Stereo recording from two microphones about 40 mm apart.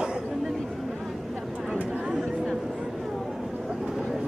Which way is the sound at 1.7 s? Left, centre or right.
Right.